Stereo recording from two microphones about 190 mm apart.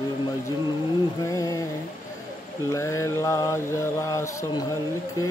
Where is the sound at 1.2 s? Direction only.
15° left (ahead or behind).